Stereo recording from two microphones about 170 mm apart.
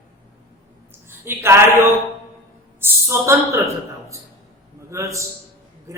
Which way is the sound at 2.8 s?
15° right (ahead or behind).